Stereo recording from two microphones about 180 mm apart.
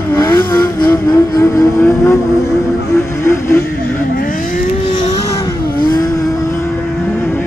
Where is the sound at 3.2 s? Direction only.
15° left (ahead or behind).